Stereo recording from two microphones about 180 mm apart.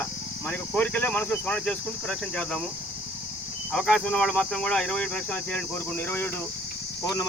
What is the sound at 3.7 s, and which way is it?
Speech, 5° left (ahead or behind).